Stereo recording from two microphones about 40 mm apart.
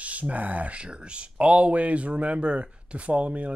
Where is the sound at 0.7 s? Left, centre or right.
Right.